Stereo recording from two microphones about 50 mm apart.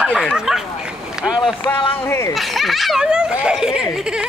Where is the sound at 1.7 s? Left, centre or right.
Left.